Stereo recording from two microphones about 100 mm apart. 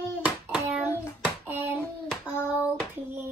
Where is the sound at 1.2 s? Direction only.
20° right (ahead or behind).